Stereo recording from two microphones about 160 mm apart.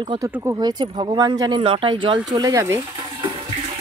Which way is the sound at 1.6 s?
35° right (ahead or behind).